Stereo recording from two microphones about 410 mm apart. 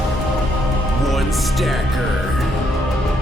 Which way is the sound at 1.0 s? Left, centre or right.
Centre.